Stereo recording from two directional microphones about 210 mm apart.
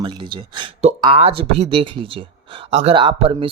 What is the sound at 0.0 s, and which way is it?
Speech, 25° right (ahead or behind).